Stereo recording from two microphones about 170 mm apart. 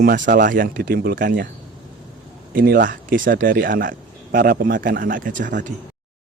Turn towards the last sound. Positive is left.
turn(degrees=-50)  # may be behind; listen again after turning